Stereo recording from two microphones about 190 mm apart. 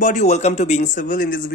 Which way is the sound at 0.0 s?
40° left (ahead or behind).